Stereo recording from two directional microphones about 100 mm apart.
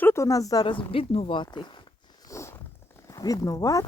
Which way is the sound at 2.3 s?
30° left (ahead or behind).